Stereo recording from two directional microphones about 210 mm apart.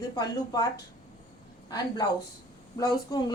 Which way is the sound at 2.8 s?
20° left (ahead or behind).